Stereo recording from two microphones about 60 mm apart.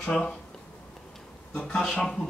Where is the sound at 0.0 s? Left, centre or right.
Centre.